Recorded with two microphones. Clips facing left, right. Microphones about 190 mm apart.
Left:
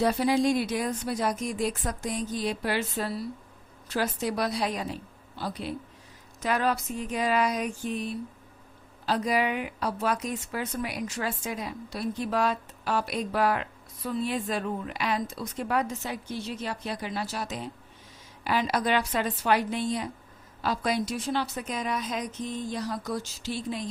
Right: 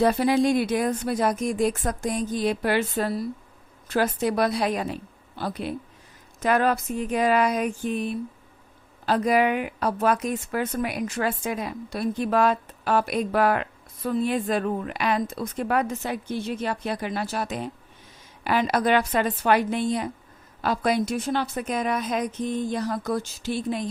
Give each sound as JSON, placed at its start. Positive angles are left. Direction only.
{"t": 0.0, "sound": "a woman's voice", "side_deg": -55}